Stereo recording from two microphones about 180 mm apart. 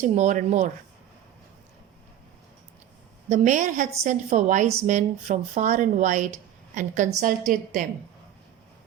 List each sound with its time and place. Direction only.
0.0 s speech: 40° right (ahead or behind)
3.2 s a woman's voice: 45° right (ahead or behind)